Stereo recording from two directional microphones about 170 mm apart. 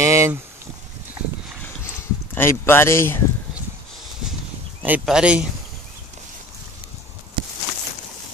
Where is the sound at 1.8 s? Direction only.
15° left (ahead or behind).